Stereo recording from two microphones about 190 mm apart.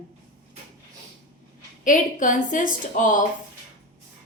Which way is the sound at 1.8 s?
45° left (ahead or behind).